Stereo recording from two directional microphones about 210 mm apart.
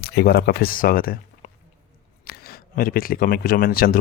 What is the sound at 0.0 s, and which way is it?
Speech, 50° left (ahead or behind).